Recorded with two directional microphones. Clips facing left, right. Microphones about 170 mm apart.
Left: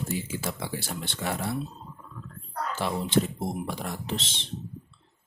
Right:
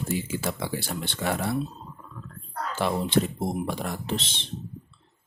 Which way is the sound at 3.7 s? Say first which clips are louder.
Right 3 dB; 55° right (ahead or behind).